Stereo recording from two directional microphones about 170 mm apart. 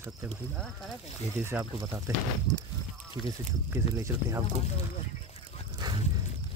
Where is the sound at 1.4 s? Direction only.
15° right (ahead or behind).